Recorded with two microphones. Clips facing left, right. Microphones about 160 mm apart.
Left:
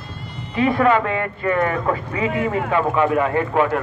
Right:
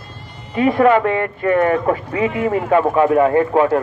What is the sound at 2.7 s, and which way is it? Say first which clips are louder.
A man's voice: right 5 dB; 35° right (ahead or behind).